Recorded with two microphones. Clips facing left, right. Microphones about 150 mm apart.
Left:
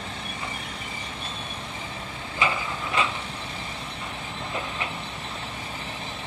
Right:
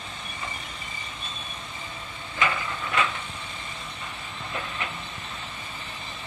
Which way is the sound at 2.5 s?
20° left (ahead or behind).